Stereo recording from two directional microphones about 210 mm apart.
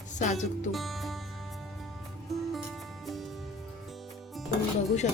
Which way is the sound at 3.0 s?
Centre (ahead or behind).